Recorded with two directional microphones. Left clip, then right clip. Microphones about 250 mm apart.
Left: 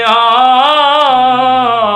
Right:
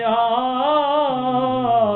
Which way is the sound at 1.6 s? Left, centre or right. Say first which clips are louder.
Left 6 dB; centre.